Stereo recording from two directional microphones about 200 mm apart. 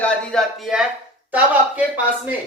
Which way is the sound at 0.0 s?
5° left (ahead or behind).